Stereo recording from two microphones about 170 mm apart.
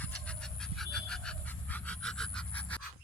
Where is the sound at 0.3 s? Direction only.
5° left (ahead or behind).